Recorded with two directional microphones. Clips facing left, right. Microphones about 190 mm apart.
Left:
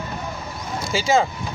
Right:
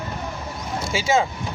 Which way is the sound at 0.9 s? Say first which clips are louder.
Left 2 dB; 5° right (ahead or behind).